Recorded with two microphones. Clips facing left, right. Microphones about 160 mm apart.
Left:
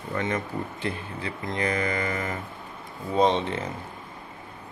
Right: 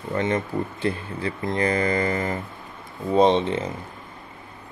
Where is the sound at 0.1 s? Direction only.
30° right (ahead or behind).